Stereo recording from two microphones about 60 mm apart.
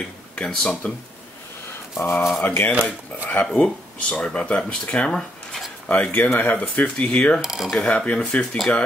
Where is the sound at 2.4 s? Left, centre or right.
Left.